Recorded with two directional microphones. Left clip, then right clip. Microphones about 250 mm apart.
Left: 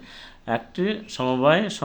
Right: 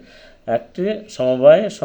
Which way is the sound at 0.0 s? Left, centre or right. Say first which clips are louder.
Right 6 dB; centre.